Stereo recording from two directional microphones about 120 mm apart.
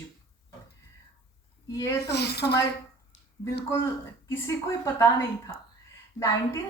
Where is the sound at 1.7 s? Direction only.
25° left (ahead or behind).